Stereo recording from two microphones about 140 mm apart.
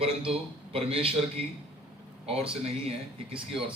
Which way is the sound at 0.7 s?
45° right (ahead or behind).